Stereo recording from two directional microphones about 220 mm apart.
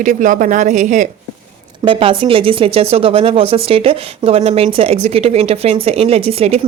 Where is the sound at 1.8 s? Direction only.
25° right (ahead or behind).